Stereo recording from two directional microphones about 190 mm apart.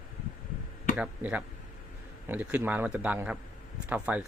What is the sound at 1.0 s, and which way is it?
A man's voice, 5° right (ahead or behind).